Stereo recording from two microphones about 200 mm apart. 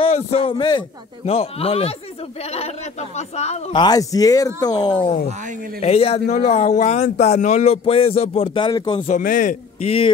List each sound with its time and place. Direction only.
0.0 s a man's voice: 30° left (ahead or behind)
3.8 s a man's voice: 20° left (ahead or behind)
9.0 s speech: 40° left (ahead or behind)